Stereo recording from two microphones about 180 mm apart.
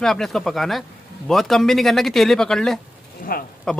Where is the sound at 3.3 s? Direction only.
55° left (ahead or behind).